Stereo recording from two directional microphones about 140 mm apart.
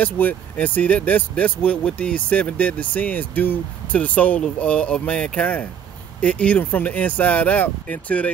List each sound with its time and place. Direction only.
0.0 s speech: 10° left (ahead or behind)